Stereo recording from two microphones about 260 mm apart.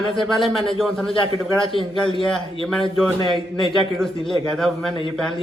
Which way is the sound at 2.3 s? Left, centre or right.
Centre.